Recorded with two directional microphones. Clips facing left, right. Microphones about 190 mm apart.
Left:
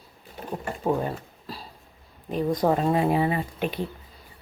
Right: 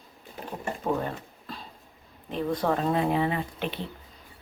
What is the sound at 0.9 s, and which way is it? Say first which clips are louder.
Speech: left 3 dB; 15° left (ahead or behind).